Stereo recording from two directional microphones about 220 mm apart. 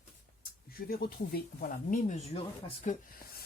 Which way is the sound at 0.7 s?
45° left (ahead or behind).